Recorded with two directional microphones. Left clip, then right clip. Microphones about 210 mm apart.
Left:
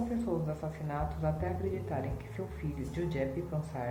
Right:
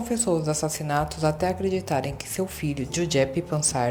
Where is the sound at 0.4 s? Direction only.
45° right (ahead or behind).